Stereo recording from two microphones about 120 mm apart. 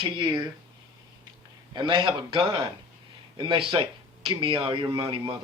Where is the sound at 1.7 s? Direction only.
40° right (ahead or behind).